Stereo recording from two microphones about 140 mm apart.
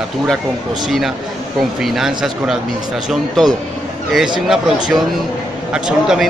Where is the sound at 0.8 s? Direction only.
Centre (ahead or behind).